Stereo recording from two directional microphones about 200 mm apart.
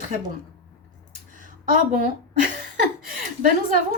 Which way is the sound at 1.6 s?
45° right (ahead or behind).